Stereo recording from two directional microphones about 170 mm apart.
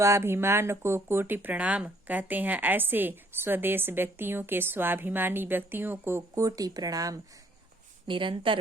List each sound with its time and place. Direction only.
0.0 s speech: 15° right (ahead or behind)